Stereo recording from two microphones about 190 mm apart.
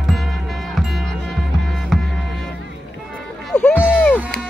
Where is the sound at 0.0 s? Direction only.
Centre (ahead or behind).